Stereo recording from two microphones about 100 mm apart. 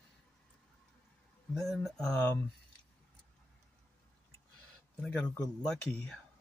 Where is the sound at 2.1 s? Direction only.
20° left (ahead or behind).